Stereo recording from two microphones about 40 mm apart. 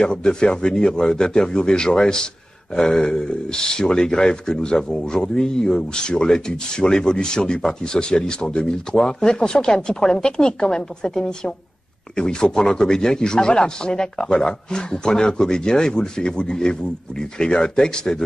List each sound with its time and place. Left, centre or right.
0.0 s speech: left